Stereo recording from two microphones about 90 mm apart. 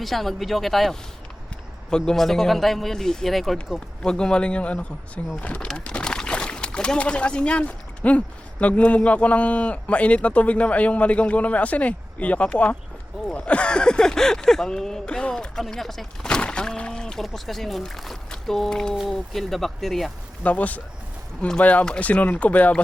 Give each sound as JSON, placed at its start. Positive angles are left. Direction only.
{"t": 0.0, "sound": "a man's voice", "side_deg": 0}
{"t": 20.4, "sound": "speech", "side_deg": 15}